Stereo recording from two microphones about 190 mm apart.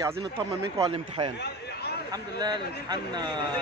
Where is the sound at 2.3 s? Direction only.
20° right (ahead or behind).